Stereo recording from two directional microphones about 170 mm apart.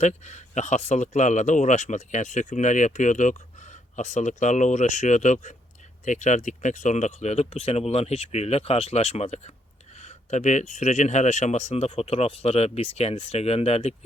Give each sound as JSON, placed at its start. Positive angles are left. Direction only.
{"t": 0.0, "sound": "speech", "side_deg": 45}